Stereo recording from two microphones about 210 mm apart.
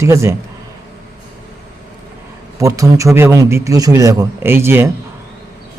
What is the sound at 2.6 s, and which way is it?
Speech, 15° right (ahead or behind).